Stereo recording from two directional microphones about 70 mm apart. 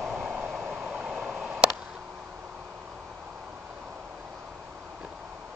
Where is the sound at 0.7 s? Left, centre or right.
Centre.